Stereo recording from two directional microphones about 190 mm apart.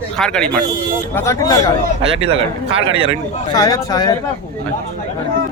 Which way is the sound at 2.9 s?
30° right (ahead or behind).